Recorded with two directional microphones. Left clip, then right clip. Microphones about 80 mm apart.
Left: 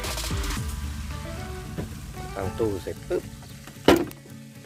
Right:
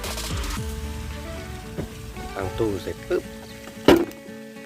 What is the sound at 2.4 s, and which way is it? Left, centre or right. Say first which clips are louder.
Speech: right 2 dB; left.